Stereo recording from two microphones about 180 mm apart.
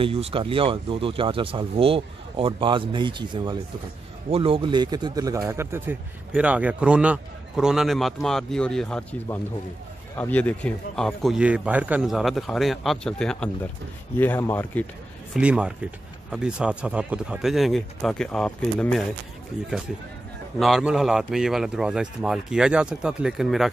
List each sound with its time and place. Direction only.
0.0 s speech: 30° right (ahead or behind); by 14.9 s 10° left (ahead or behind)
15.3 s speech: 5° right (ahead or behind)
20.5 s speech: centre (ahead or behind)